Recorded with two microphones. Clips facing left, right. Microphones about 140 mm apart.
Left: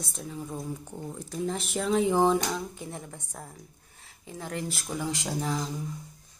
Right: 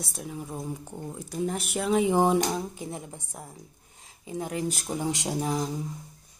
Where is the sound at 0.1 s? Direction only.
15° right (ahead or behind).